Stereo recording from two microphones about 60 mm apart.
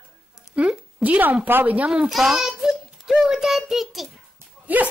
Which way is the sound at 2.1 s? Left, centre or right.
Centre.